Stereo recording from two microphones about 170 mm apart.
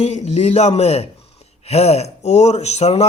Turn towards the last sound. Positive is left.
turn(degrees=40)  # may be behind; listen again after turning